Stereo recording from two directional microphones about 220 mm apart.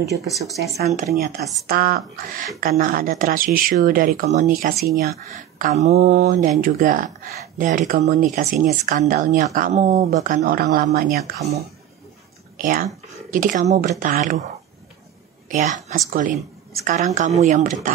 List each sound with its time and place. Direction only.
0.8 s speech: 35° right (ahead or behind)
1.4 s speech: centre (ahead or behind)
1.7 s speech: 40° right (ahead or behind)
12.5 s speech: 40° right (ahead or behind)
15.4 s a woman's voice: 35° right (ahead or behind)